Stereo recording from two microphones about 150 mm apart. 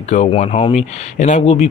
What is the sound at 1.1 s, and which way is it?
Speech, 55° left (ahead or behind).